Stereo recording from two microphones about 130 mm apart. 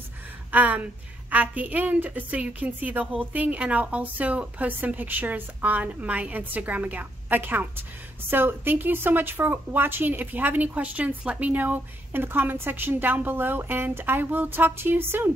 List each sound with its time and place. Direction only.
0.5 s a woman's voice: 10° right (ahead or behind)